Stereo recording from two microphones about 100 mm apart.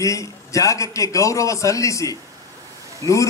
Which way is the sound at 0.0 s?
30° left (ahead or behind).